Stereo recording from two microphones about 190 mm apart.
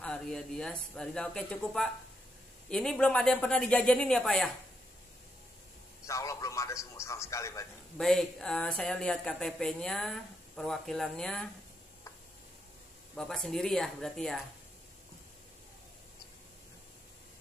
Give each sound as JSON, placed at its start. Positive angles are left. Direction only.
{"t": 0.0, "sound": "speech", "side_deg": 5}
{"t": 6.0, "sound": "a man's voice", "side_deg": 15}
{"t": 8.0, "sound": "speech", "side_deg": 0}
{"t": 13.1, "sound": "speech", "side_deg": 0}